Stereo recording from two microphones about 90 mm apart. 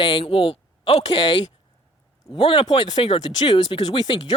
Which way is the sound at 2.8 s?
55° left (ahead or behind).